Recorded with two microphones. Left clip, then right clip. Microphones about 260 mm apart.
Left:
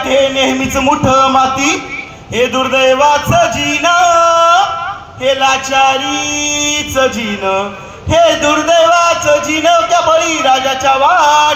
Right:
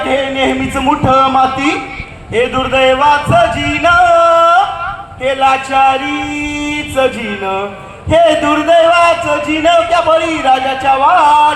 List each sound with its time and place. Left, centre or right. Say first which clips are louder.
0.3 s a man's voice: left 1 dB; left
2.3 s a sound: even; left
5.2 s a man's voice: even; left